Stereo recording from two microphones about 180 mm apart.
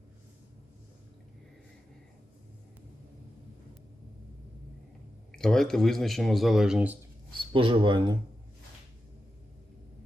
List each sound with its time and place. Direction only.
5.4 s speech: 5° left (ahead or behind)
7.5 s speech: 30° right (ahead or behind)